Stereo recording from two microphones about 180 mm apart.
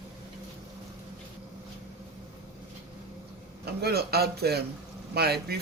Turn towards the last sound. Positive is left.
turn(degrees=-60)  # may be behind; listen again after turning